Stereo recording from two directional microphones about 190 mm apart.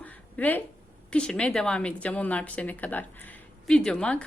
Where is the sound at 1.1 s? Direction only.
5° left (ahead or behind).